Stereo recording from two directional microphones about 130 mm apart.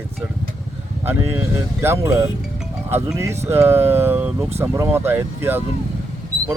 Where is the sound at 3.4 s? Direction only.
20° right (ahead or behind).